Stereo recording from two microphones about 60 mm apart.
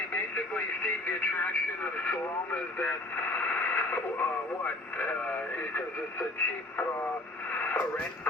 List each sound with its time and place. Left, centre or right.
0.1 s speech: left
7.5 s radio: left